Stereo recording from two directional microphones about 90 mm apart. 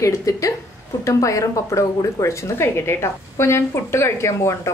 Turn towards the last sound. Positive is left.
turn(degrees=30)  # may be behind; listen again after turning